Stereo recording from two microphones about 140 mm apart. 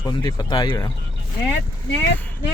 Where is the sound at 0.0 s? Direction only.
30° left (ahead or behind).